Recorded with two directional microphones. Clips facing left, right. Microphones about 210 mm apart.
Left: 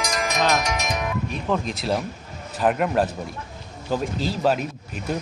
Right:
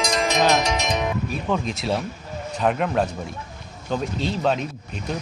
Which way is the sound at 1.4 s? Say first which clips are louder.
Left 1 dB; centre (ahead or behind).